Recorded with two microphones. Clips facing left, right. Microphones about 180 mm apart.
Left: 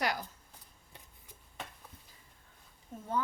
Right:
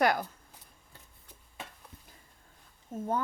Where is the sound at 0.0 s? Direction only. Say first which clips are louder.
Right 8 dB; 55° right (ahead or behind).